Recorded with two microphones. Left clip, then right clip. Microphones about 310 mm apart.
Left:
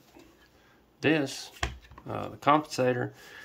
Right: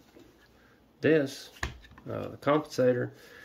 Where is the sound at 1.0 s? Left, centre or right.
Centre.